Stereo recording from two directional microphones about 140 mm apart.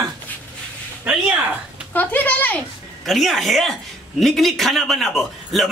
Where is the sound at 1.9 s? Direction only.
10° left (ahead or behind).